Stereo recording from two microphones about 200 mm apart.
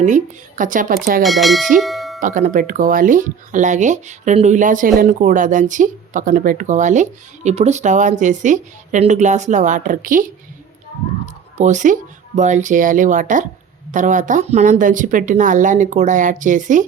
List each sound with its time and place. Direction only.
0.0 s speech: 40° right (ahead or behind)
1.2 s speech: centre (ahead or behind)
1.8 s a sound: centre (ahead or behind)
2.2 s speech: 40° right (ahead or behind)
11.5 s speech: 35° right (ahead or behind)